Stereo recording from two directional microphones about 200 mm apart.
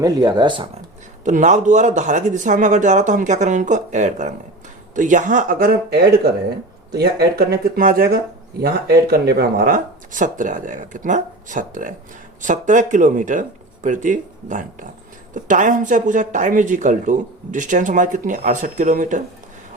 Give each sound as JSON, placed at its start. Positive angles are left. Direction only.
{"t": 0.0, "sound": "speech", "side_deg": -20}
{"t": 1.2, "sound": "speech", "side_deg": -40}